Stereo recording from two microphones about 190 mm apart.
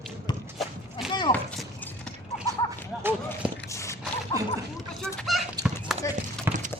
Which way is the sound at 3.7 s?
15° left (ahead or behind).